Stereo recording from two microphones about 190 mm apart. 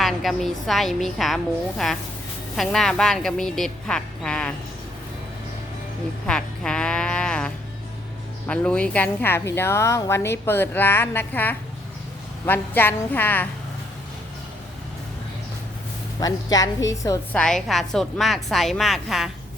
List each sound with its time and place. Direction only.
0.0 s a woman's voice: centre (ahead or behind)
6.2 s music: 5° left (ahead or behind)
8.4 s a woman's voice: 5° left (ahead or behind)
16.2 s a woman's voice: 20° left (ahead or behind)
17.3 s a woman's voice: 5° left (ahead or behind)